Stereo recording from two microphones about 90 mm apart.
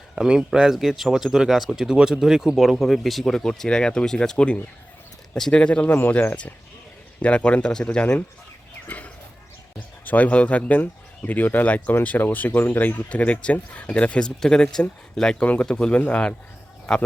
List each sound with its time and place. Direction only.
0.2 s speech: 10° right (ahead or behind); by 8.2 s 15° left (ahead or behind)
8.9 s a sound: 15° left (ahead or behind)
10.1 s speech: 15° left (ahead or behind)